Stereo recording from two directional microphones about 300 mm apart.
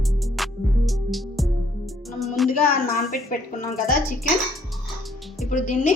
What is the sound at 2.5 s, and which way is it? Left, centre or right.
Speech, left.